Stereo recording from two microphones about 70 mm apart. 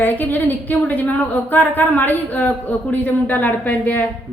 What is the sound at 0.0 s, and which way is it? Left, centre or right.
Speech, left.